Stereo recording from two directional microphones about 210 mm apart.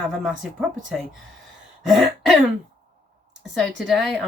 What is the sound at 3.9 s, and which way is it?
Speech, centre (ahead or behind).